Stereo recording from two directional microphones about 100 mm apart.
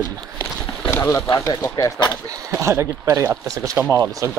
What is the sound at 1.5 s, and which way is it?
Speech, 40° left (ahead or behind).